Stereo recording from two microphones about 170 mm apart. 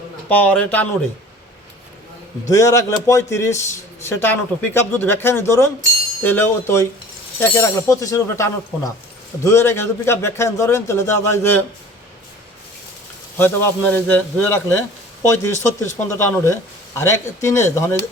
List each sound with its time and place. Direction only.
0.3 s speech: 10° left (ahead or behind)
2.5 s speech: 20° left (ahead or behind)
13.4 s speech: 10° left (ahead or behind)